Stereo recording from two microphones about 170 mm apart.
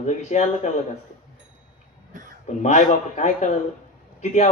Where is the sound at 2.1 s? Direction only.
50° right (ahead or behind).